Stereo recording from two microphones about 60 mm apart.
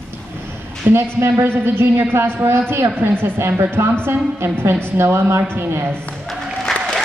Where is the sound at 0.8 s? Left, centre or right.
Right.